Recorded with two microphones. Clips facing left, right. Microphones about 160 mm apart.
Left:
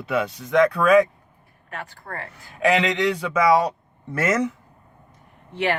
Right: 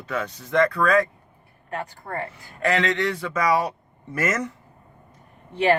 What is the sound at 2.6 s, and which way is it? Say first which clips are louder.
Speech: left 3 dB; 10° left (ahead or behind).